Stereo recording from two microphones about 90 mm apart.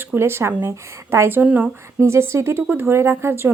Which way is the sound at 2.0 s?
30° right (ahead or behind).